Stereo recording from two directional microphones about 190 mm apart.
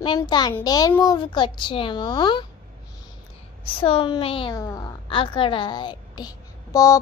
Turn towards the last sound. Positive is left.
turn(degrees=20)  # may be behind; listen again after turning